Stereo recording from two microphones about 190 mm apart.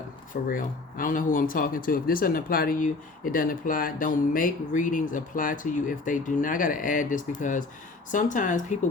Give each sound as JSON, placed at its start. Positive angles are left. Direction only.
{"t": 0.4, "sound": "speech", "side_deg": 45}